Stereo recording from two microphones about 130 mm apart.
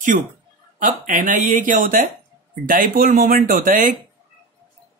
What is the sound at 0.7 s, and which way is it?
Speech, 90° right.